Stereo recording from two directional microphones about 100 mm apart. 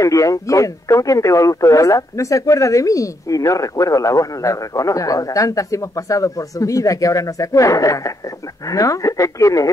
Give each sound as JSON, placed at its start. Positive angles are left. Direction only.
{"t": 0.0, "sound": "speech", "side_deg": 35}